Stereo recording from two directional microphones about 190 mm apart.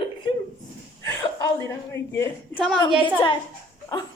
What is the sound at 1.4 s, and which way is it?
Speech, 15° left (ahead or behind).